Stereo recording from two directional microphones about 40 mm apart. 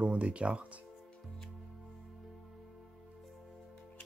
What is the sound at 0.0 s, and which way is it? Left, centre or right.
Speech, right.